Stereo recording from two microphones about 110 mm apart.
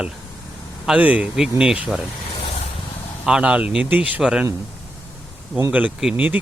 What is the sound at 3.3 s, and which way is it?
Speech, 10° right (ahead or behind).